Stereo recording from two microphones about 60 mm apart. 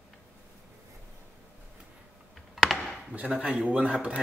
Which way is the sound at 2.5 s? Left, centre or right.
Centre.